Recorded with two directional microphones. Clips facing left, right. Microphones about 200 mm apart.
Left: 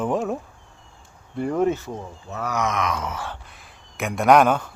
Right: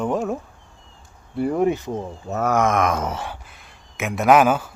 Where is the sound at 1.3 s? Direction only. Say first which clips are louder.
Right 2 dB; 10° right (ahead or behind).